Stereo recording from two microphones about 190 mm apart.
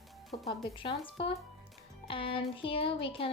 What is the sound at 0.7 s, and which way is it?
A woman's voice, 25° left (ahead or behind).